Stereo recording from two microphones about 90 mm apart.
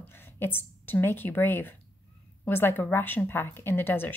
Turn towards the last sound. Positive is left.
turn(degrees=25)  # may be behind; listen again after turning